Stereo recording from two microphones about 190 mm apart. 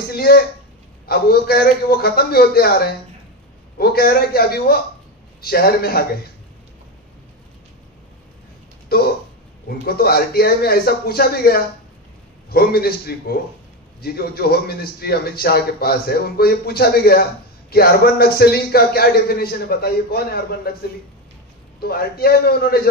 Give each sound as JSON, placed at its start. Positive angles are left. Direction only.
{"t": 0.1, "sound": "a sound", "side_deg": 55}
{"t": 1.0, "sound": "a man's voice", "side_deg": 55}
{"t": 9.8, "sound": "a man's voice", "side_deg": 55}
{"t": 21.8, "sound": "a man's voice", "side_deg": 55}